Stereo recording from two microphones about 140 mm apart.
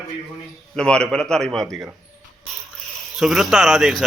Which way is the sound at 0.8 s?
5° left (ahead or behind).